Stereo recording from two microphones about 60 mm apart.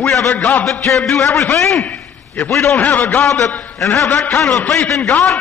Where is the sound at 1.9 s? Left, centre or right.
Left.